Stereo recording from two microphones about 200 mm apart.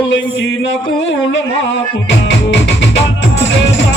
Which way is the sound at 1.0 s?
65° left (ahead or behind).